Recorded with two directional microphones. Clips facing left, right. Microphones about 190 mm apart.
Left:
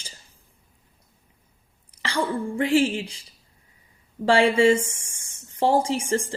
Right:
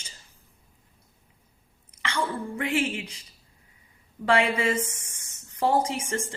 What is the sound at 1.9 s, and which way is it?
A woman's voice, 30° left (ahead or behind).